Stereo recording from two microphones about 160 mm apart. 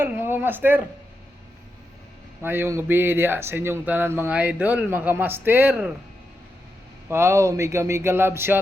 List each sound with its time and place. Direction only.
0.0 s speech: 15° right (ahead or behind)
2.4 s speech: 15° right (ahead or behind)
7.1 s speech: 15° right (ahead or behind)